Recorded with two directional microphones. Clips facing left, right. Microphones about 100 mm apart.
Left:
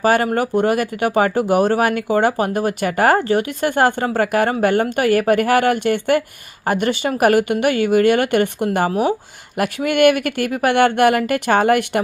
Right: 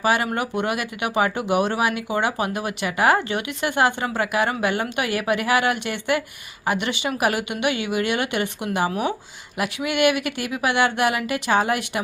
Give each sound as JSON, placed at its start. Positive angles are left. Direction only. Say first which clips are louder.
{"t": 0.0, "sound": "speech", "louder": "left 6 dB", "side_deg": 45}